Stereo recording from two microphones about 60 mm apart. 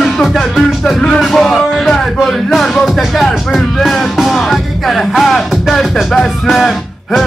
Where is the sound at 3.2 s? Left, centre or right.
Centre.